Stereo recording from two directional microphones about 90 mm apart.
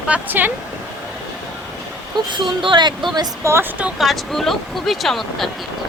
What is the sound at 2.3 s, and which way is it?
Speech, 65° right (ahead or behind).